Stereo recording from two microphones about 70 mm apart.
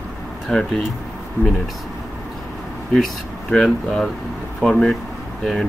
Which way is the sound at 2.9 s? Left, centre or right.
Centre.